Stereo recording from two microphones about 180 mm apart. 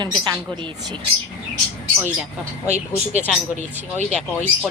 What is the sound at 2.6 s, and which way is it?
Speech, 40° right (ahead or behind).